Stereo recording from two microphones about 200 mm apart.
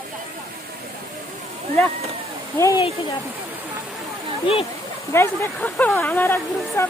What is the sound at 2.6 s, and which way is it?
Speech, 15° left (ahead or behind).